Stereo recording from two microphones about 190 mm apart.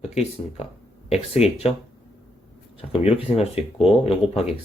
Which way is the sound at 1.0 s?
35° left (ahead or behind).